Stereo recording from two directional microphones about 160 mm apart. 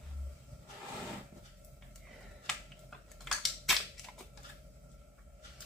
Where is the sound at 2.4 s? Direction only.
5° left (ahead or behind).